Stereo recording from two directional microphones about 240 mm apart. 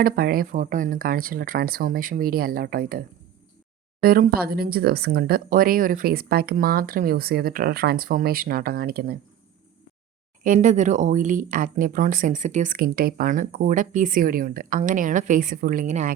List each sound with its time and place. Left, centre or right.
0.0 s speech: right
4.0 s speech: right
10.4 s speech: right